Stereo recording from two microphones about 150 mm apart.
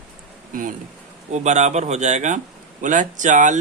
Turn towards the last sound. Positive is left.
turn(degrees=-55)  # may be behind; listen again after turning